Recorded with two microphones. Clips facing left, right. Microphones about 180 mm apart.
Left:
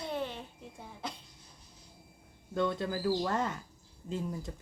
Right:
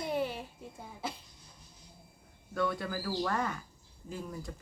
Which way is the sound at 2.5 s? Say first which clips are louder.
Left 2 dB; 25° left (ahead or behind).